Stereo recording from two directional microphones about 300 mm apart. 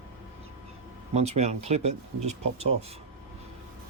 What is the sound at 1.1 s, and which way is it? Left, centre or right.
Speech, right.